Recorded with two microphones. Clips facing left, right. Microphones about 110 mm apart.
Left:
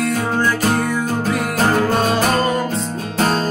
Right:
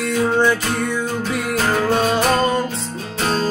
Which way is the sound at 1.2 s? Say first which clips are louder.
Left 3 dB; 40° left (ahead or behind).